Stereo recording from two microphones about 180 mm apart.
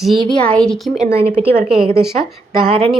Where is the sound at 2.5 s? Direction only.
30° right (ahead or behind).